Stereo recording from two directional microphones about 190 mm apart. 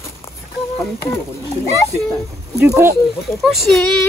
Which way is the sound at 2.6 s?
15° right (ahead or behind).